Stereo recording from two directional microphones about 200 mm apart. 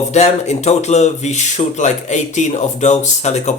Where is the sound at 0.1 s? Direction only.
35° left (ahead or behind).